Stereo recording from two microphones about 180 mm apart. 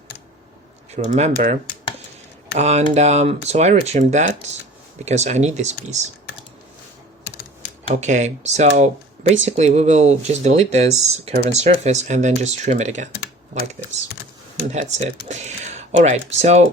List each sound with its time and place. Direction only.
0.9 s speech: 40° right (ahead or behind)
2.6 s speech: 40° right (ahead or behind)
8.0 s speech: 40° right (ahead or behind)
14.7 s speech: 40° right (ahead or behind)